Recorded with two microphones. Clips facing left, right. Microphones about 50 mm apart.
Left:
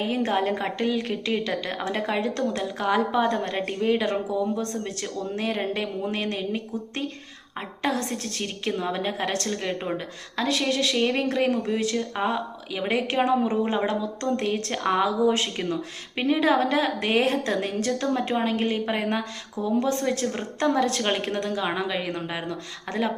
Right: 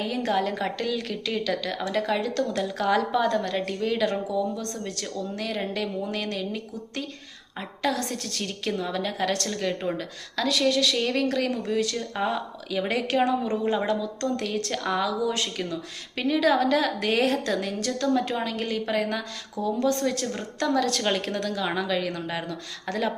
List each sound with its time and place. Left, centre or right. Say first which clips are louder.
0.0 s speech: left 1 dB; left
2.5 s speech: right 1 dB; centre; by 17.7 s left
17.7 s speech: even; left